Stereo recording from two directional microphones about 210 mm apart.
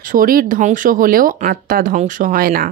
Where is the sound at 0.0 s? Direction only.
40° right (ahead or behind).